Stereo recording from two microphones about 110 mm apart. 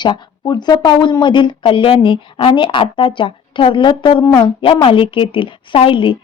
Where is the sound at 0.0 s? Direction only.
45° left (ahead or behind).